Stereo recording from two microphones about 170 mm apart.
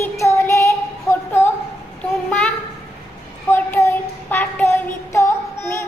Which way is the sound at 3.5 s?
15° left (ahead or behind).